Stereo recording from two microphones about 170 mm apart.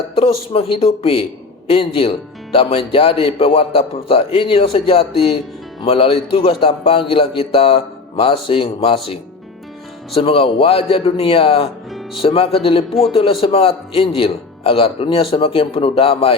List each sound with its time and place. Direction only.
0.2 s a man's voice: 35° left (ahead or behind)
10.2 s a man's voice: 35° left (ahead or behind)